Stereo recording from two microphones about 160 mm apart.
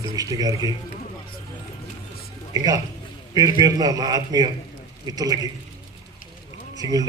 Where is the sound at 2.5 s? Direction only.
25° right (ahead or behind).